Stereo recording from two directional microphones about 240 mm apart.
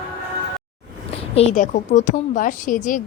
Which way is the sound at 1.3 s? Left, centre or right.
Left.